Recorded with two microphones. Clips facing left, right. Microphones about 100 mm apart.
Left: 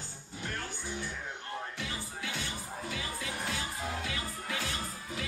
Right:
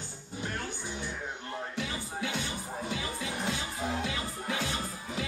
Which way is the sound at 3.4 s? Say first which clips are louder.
Right 4 dB; 25° right (ahead or behind).